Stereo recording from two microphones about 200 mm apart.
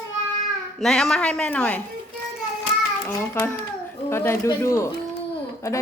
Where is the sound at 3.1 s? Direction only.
10° left (ahead or behind).